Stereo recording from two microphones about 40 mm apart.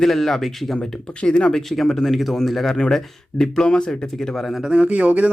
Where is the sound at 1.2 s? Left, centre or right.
Left.